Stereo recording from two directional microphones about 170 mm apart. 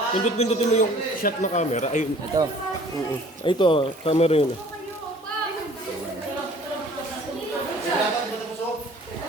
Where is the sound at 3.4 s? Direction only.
30° left (ahead or behind).